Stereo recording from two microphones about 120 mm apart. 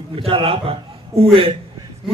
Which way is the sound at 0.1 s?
50° right (ahead or behind).